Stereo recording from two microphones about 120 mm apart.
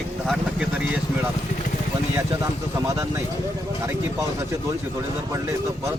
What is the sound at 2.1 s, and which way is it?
Speech, 25° right (ahead or behind).